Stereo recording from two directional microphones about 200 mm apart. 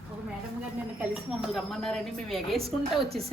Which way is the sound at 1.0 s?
Centre (ahead or behind).